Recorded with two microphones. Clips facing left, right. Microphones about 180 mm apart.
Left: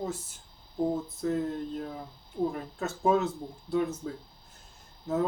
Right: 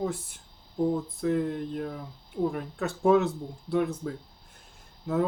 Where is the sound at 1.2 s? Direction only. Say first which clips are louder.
Right 3 dB; 70° right (ahead or behind).